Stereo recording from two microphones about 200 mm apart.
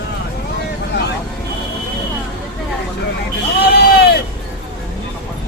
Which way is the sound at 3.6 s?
55° left (ahead or behind).